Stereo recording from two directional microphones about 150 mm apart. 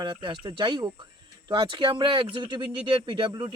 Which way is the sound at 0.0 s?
30° right (ahead or behind).